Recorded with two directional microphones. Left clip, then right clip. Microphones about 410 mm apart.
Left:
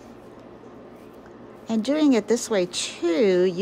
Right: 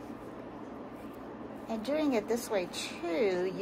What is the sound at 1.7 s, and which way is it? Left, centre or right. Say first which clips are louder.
Speech: left 10 dB; centre.